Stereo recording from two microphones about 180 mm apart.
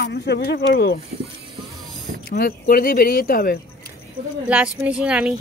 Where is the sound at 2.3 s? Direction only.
55° left (ahead or behind).